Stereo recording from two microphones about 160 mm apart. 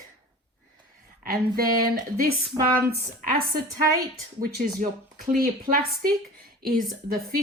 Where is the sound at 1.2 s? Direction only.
70° right (ahead or behind).